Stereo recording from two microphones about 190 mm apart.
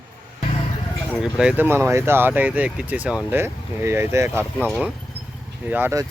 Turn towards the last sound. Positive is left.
turn(degrees=-10)  # may be behind; listen again after turning